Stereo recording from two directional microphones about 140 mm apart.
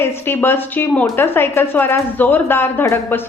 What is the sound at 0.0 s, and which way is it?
A woman's voice, 15° left (ahead or behind).